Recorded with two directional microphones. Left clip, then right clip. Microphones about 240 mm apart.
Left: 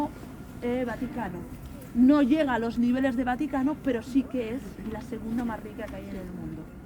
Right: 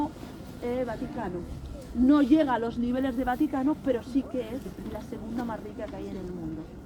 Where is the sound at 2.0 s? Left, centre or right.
Left.